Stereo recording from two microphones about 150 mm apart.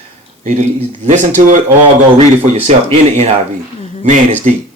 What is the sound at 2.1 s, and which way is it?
Speech, 40° right (ahead or behind).